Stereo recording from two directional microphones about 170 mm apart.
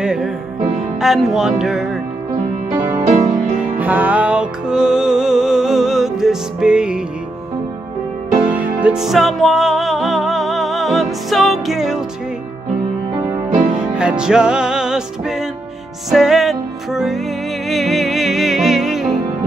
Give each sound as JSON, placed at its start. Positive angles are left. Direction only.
{"t": 0.0, "sound": "music", "side_deg": -5}
{"t": 1.0, "sound": "speech", "side_deg": 0}
{"t": 2.7, "sound": "music", "side_deg": -15}
{"t": 3.1, "sound": "music", "side_deg": -45}
{"t": 3.7, "sound": "music", "side_deg": -10}
{"t": 8.4, "sound": "music", "side_deg": -5}
{"t": 13.7, "sound": "music", "side_deg": -5}